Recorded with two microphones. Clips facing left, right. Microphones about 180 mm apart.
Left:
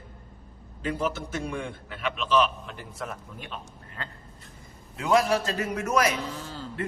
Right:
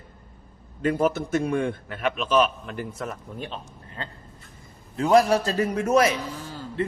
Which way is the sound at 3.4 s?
30° right (ahead or behind).